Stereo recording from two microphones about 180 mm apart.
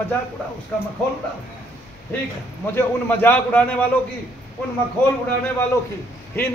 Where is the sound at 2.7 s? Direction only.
10° left (ahead or behind).